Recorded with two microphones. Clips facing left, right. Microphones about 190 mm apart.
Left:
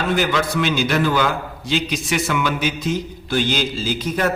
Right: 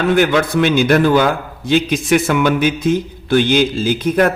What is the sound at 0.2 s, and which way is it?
A man's voice, 55° right (ahead or behind).